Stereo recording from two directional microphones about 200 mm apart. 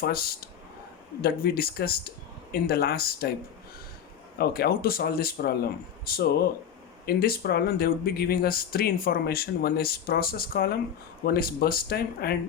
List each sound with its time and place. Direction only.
0.0 s speech: 50° left (ahead or behind)
4.4 s speech: 50° left (ahead or behind)